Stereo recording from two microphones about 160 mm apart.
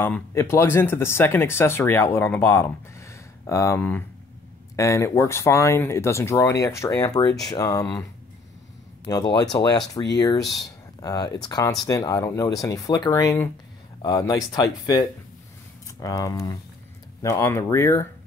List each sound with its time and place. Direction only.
0.0 s speech: 15° left (ahead or behind)
9.1 s speech: 25° left (ahead or behind)